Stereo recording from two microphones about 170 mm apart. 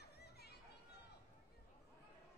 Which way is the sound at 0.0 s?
70° left (ahead or behind).